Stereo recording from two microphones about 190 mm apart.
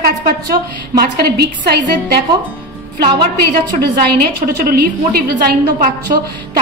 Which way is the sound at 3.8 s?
55° right (ahead or behind).